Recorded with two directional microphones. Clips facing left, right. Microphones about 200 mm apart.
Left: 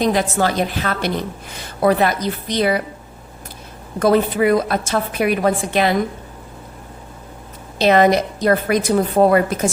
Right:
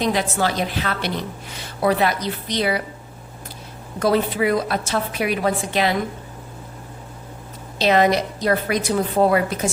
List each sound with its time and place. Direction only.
0.0 s a woman's voice: 45° left (ahead or behind)
4.0 s a woman's voice: 50° left (ahead or behind)
7.8 s a woman's voice: 50° left (ahead or behind)